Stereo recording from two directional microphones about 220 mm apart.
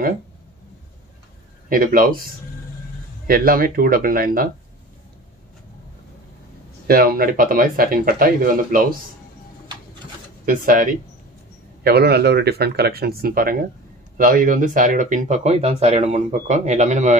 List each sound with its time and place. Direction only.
1.7 s speech: 40° right (ahead or behind)
6.9 s speech: 40° right (ahead or behind)
10.4 s speech: 40° right (ahead or behind)